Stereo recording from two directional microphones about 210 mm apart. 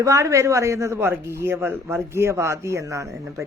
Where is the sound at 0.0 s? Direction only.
15° right (ahead or behind).